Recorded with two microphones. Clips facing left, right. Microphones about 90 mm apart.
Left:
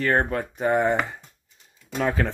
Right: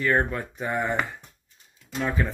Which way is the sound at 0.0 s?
55° left (ahead or behind).